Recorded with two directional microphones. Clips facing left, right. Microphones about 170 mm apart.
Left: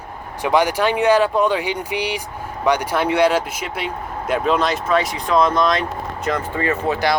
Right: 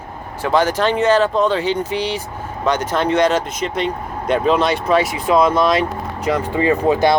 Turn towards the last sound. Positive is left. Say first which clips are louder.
# right 5 dB
turn(degrees=-15)  # may be behind; listen again after turning